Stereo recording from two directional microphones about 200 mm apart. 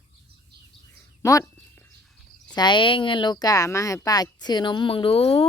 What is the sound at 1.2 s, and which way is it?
Speech, 15° left (ahead or behind).